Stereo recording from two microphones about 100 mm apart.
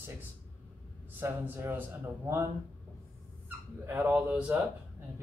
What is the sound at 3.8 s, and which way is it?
Speech, 15° right (ahead or behind).